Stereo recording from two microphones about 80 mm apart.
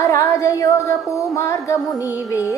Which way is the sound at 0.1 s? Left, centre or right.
Left.